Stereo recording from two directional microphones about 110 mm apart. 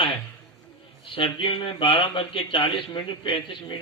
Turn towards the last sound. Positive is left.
turn(degrees=50)  # may be behind; listen again after turning